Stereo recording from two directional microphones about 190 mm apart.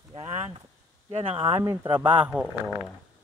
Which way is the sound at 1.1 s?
30° right (ahead or behind).